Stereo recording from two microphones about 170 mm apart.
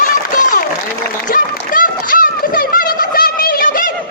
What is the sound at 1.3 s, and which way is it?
Turkey, 55° left (ahead or behind).